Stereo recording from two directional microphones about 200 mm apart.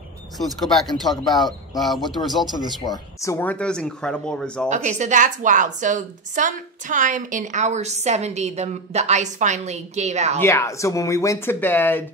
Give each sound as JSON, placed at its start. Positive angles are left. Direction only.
{"t": 0.9, "sound": "speech", "side_deg": 0}
{"t": 1.2, "sound": "speech", "side_deg": 20}
{"t": 1.9, "sound": "speech", "side_deg": 0}
{"t": 2.8, "sound": "speech", "side_deg": 15}
{"t": 4.6, "sound": "a woman's voice", "side_deg": -35}
{"t": 10.4, "sound": "speech", "side_deg": 15}